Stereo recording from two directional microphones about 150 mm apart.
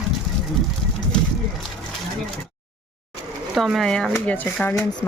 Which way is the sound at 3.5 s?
Centre (ahead or behind).